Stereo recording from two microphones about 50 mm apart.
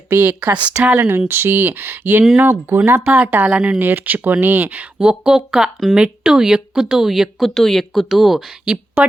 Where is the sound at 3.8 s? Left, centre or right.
Right.